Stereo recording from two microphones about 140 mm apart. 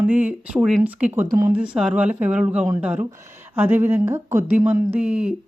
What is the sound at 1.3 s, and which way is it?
Speech, 20° right (ahead or behind).